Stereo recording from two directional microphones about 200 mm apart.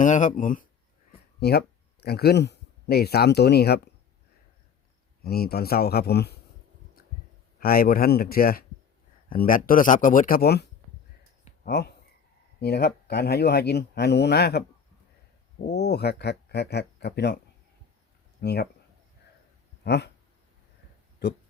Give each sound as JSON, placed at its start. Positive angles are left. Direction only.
{"t": 0.0, "sound": "speech", "side_deg": 40}
{"t": 1.4, "sound": "speech", "side_deg": 55}
{"t": 5.2, "sound": "speech", "side_deg": 50}
{"t": 7.6, "sound": "speech", "side_deg": 45}
{"t": 15.6, "sound": "speech", "side_deg": 55}
{"t": 18.3, "sound": "speech", "side_deg": 55}
{"t": 19.8, "sound": "speech", "side_deg": 60}